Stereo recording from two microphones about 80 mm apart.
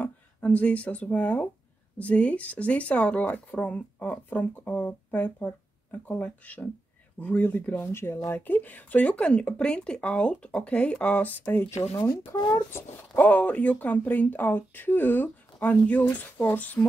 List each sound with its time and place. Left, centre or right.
0.0 s speech: centre
11.5 s speech: left
12.7 s speech: centre